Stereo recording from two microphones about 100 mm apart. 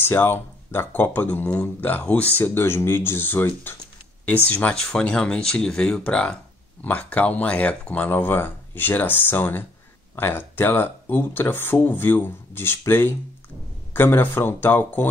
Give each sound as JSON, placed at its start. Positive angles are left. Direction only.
{"t": 0.0, "sound": "speech", "side_deg": 20}